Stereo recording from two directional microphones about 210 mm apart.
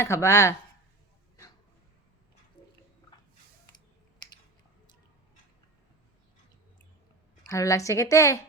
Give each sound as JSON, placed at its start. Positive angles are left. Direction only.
{"t": 0.0, "sound": "a woman's voice", "side_deg": 15}
{"t": 2.6, "sound": "a sound", "side_deg": 25}
{"t": 7.4, "sound": "a woman's voice", "side_deg": 15}